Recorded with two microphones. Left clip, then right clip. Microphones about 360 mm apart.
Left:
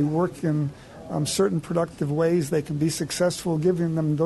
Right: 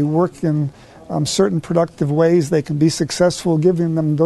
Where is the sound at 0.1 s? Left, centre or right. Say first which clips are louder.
Right 7 dB; right.